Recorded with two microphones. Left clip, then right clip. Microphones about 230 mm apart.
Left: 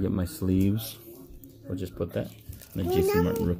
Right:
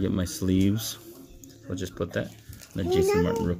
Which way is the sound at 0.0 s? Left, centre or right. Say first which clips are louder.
Right 2 dB; centre.